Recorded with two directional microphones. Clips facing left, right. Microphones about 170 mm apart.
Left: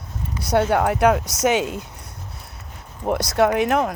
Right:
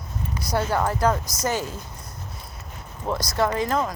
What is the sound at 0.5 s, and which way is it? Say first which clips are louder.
Speech: left 5 dB; 70° left (ahead or behind).